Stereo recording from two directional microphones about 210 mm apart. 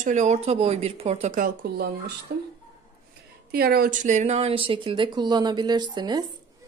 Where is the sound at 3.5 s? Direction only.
45° right (ahead or behind); by 6.3 s 20° right (ahead or behind).